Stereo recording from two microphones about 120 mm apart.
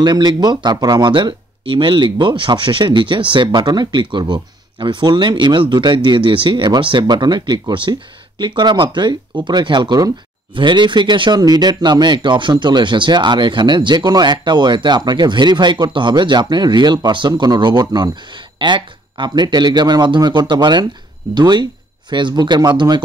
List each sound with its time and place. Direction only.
0.0 s speech: 35° right (ahead or behind)